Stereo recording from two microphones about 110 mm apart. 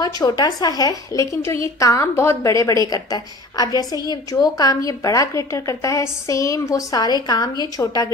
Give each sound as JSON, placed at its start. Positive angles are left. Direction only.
{"t": 0.0, "sound": "a woman's voice", "side_deg": 35}